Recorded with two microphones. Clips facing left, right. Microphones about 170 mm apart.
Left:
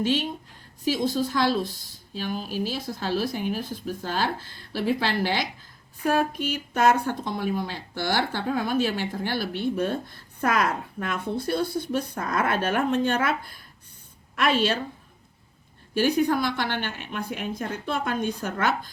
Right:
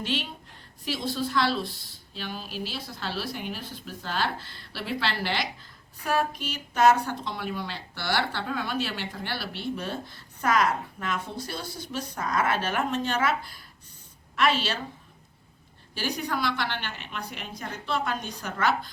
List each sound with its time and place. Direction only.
0.0 s speech: 45° left (ahead or behind)
16.0 s speech: 55° left (ahead or behind)